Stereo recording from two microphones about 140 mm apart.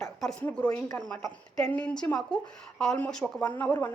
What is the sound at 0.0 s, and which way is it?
A woman's voice, 5° left (ahead or behind).